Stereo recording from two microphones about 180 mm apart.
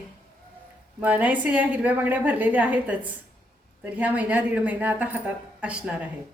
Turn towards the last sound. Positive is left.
turn(degrees=-5)  # may be behind; listen again after turning